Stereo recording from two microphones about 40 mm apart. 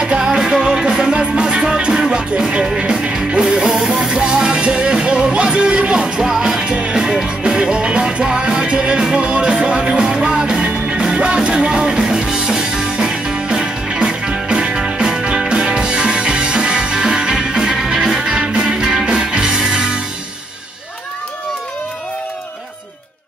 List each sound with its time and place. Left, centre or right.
0.0 s music: centre
3.5 s music: centre
4.1 s music: centre
14.7 s music: centre